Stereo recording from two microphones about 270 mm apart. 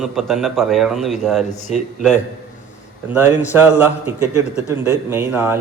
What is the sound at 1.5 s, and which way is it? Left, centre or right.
Speech, left.